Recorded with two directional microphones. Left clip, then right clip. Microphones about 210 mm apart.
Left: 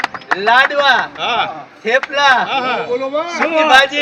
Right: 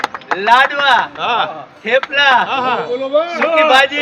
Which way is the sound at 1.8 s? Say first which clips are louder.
Even; centre (ahead or behind).